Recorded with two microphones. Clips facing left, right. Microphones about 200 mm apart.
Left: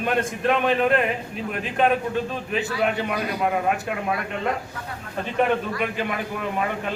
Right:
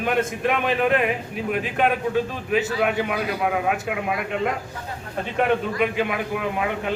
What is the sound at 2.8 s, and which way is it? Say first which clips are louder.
A man's voice: right 1 dB; 5° right (ahead or behind).